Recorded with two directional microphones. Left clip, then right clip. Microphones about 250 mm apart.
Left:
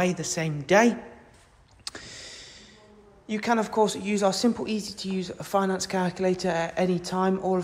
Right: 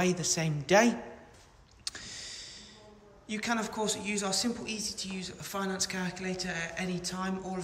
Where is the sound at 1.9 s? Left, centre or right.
Centre.